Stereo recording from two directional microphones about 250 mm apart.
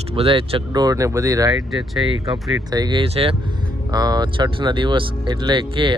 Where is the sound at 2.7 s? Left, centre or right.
Centre.